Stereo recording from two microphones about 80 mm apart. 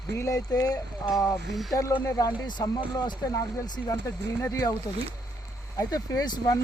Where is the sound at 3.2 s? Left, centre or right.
Left.